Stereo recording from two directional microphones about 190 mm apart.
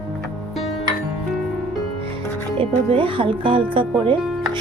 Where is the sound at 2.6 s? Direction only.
25° right (ahead or behind).